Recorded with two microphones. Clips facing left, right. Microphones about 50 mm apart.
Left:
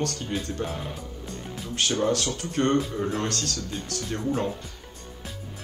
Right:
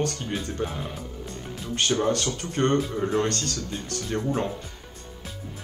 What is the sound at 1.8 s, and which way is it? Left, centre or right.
Speech, centre.